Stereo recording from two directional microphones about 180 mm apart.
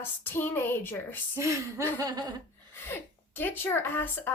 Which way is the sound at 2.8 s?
10° left (ahead or behind).